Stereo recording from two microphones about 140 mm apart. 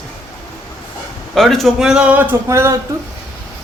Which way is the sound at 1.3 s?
Centre (ahead or behind).